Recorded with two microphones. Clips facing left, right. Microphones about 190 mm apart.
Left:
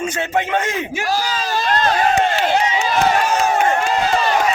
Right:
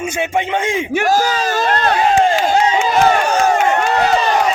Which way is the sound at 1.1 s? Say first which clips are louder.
Right 4 dB; 45° right (ahead or behind).